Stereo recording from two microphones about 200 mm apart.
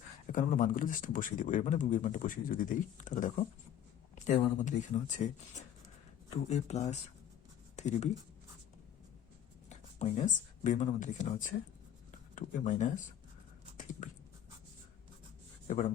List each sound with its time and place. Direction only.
0.3 s speech: 40° left (ahead or behind)
9.6 s speech: 35° left (ahead or behind)
12.1 s a sound: 40° left (ahead or behind)
15.6 s speech: 40° left (ahead or behind)